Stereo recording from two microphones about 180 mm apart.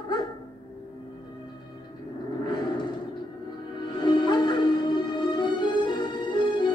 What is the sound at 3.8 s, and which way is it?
Music, 25° left (ahead or behind).